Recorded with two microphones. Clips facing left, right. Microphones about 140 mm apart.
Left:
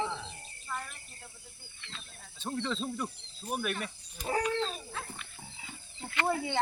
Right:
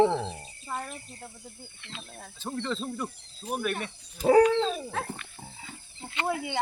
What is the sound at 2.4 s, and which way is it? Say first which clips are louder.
Speech: right 2 dB; centre (ahead or behind).